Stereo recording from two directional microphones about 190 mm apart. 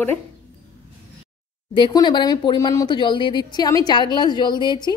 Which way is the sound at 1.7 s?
25° left (ahead or behind).